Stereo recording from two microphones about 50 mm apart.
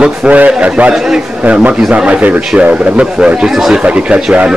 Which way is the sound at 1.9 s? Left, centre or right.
Right.